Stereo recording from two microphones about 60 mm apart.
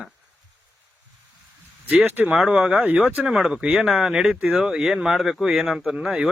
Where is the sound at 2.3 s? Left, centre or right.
Centre.